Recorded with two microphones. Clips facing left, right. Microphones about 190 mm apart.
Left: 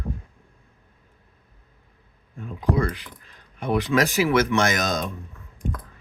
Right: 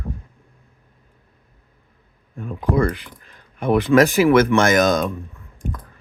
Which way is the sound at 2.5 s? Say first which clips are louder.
Right 4 dB; 55° right (ahead or behind).